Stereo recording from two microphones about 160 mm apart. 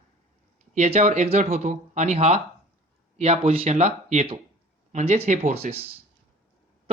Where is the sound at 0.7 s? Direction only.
45° right (ahead or behind).